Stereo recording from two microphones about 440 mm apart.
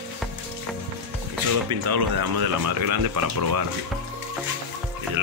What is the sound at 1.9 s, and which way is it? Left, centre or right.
Speech, right.